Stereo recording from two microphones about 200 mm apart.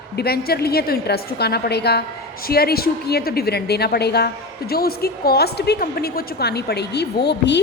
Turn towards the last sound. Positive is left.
turn(degrees=55)  # may be behind; listen again after turning